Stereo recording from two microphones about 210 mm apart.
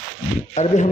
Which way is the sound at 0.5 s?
35° left (ahead or behind).